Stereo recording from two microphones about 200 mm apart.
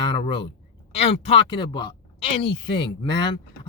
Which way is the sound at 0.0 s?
25° left (ahead or behind).